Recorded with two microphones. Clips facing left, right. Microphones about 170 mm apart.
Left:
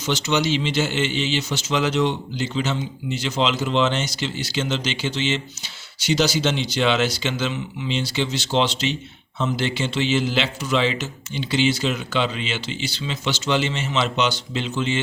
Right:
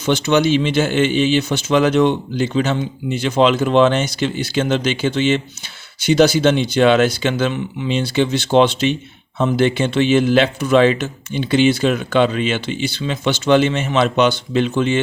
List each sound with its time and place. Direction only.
0.0 s speech: 55° right (ahead or behind)